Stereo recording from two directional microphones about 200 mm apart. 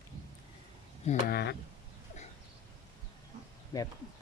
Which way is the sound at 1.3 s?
50° left (ahead or behind).